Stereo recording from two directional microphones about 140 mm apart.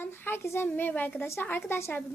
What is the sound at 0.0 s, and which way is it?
A child's voice, 15° left (ahead or behind).